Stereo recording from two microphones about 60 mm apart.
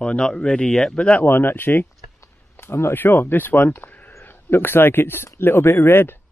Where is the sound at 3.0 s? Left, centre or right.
Left.